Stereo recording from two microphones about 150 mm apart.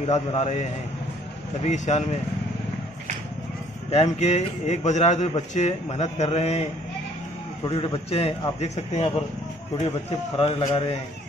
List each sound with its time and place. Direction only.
0.0 s a man's voice: 45° left (ahead or behind)
3.9 s a man's voice: 45° left (ahead or behind)
7.6 s a man's voice: 40° left (ahead or behind)
10.3 s a man's voice: 35° left (ahead or behind)